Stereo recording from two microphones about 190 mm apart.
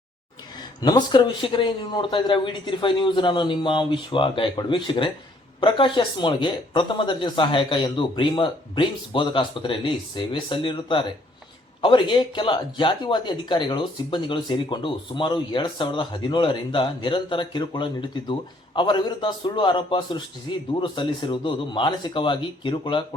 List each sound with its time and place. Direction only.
0.8 s speech: 20° left (ahead or behind)